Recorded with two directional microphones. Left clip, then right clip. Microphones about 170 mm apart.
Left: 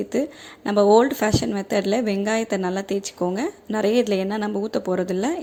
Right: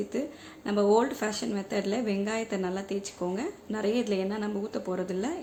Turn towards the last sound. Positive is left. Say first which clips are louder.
# left 9 dB
turn(degrees=45)  # may be behind; listen again after turning